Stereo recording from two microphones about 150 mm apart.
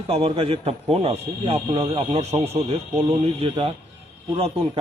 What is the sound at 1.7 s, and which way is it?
Speech, 25° right (ahead or behind).